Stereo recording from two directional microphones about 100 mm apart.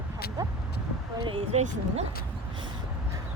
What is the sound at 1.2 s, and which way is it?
Speech, 65° right (ahead or behind).